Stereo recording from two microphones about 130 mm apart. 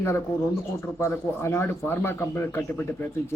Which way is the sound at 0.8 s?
20° left (ahead or behind).